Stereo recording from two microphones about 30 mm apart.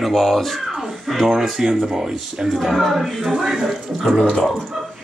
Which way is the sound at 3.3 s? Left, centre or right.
Centre.